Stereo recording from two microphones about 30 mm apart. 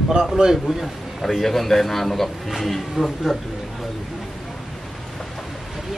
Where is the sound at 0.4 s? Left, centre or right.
Right.